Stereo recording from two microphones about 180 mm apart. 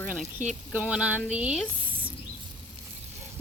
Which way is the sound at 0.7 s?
5° right (ahead or behind).